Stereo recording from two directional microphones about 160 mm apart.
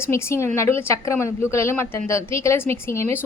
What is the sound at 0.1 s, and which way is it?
A woman's voice, 15° left (ahead or behind).